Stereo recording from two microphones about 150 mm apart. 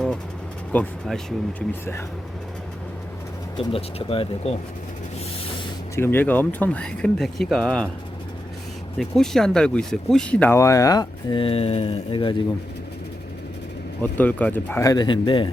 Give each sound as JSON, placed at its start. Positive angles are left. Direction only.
{"t": 1.0, "sound": "speech", "side_deg": 5}
{"t": 3.6, "sound": "speech", "side_deg": 40}
{"t": 6.0, "sound": "speech", "side_deg": 15}
{"t": 9.0, "sound": "speech", "side_deg": 0}
{"t": 14.0, "sound": "speech", "side_deg": 10}